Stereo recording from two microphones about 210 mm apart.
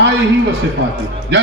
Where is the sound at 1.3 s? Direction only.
55° right (ahead or behind).